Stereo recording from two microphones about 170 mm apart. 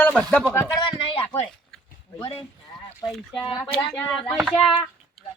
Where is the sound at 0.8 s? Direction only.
30° left (ahead or behind).